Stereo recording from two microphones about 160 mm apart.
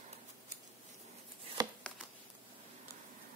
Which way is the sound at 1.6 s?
25° right (ahead or behind).